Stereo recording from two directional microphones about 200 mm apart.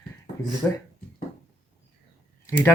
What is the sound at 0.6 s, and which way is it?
Speech, 10° left (ahead or behind).